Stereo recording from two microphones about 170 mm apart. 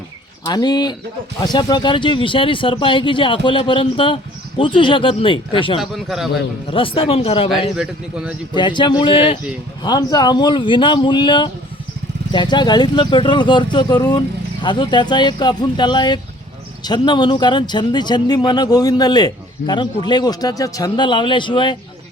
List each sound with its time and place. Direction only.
0.4 s speech: 25° left (ahead or behind)
5.8 s speech: centre (ahead or behind)
6.7 s speech: 30° left (ahead or behind)
7.8 s a man's voice: 5° right (ahead or behind)
8.5 s speech: 25° left (ahead or behind)